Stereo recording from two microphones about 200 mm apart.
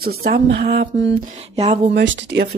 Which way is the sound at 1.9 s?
60° right (ahead or behind).